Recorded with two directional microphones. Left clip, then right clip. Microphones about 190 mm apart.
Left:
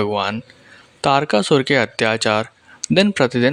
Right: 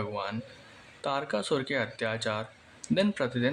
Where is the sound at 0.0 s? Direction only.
45° left (ahead or behind).